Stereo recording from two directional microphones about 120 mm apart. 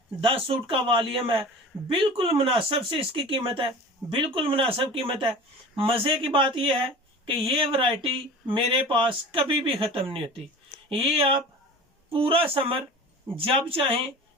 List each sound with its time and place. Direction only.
0.2 s speech: 50° right (ahead or behind)